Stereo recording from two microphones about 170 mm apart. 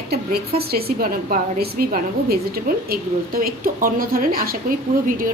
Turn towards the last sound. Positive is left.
turn(degrees=-55)  # may be behind; listen again after turning